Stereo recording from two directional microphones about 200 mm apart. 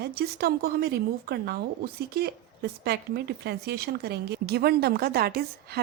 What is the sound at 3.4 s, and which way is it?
Speech, 55° right (ahead or behind).